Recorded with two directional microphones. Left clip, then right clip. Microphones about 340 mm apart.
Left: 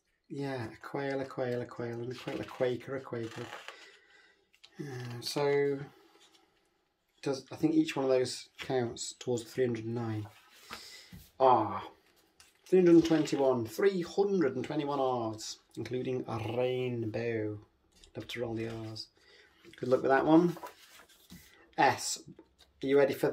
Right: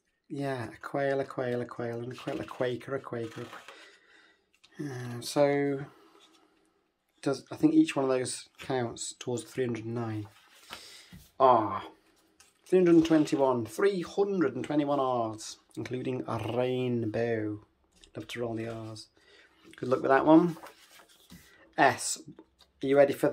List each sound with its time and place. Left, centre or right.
0.3 s speech: centre
4.7 s speech: centre
7.2 s speech: centre
10.8 s a sound: centre
12.6 s speech: centre
18.9 s a sound: centre
22.8 s speech: centre